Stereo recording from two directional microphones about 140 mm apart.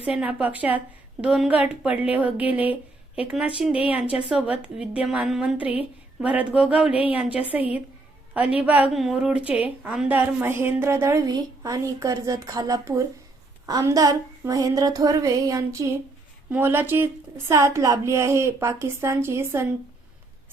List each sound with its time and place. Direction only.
0.0 s a woman's voice: 10° right (ahead or behind)
8.9 s a woman's voice: centre (ahead or behind); by 19.6 s 20° right (ahead or behind)